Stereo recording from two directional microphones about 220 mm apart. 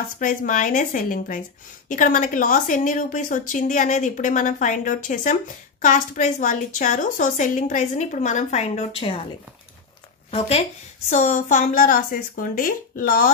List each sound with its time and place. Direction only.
0.2 s a woman's voice: 35° left (ahead or behind)
11.1 s a woman's voice: 35° left (ahead or behind)